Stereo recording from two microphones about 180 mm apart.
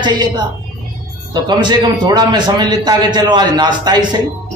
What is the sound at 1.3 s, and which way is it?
A man's voice, 25° right (ahead or behind).